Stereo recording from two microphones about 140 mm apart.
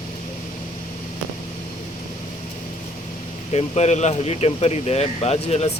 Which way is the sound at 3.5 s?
50° left (ahead or behind).